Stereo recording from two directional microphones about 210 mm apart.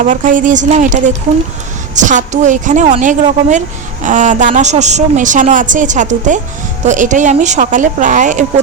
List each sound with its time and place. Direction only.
0.0 s a woman's voice: 40° right (ahead or behind)